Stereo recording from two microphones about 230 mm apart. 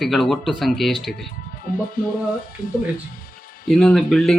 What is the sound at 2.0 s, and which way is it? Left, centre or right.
Speech, left.